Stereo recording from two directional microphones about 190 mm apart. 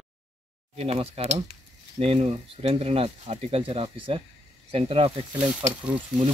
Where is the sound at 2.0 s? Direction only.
30° right (ahead or behind).